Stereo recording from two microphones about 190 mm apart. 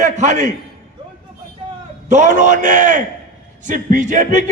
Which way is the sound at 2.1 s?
40° right (ahead or behind).